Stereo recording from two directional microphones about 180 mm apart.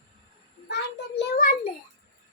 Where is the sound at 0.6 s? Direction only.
65° left (ahead or behind).